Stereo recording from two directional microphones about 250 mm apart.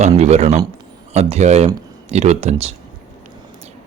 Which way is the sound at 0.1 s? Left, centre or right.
Right.